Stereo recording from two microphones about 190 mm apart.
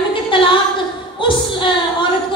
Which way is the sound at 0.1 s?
25° left (ahead or behind).